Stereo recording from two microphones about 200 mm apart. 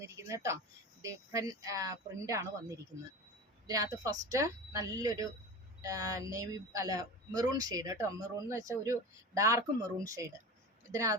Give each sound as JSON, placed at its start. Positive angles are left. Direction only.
{"t": 0.0, "sound": "speech", "side_deg": -15}